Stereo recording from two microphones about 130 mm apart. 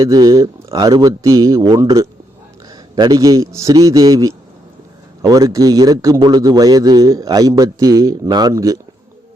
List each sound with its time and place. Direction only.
0.0 s a man's voice: 30° right (ahead or behind)